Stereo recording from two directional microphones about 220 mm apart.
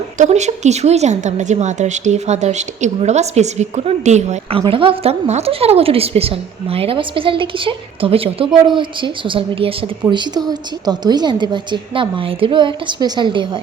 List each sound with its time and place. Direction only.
0.2 s a woman's voice: 30° right (ahead or behind)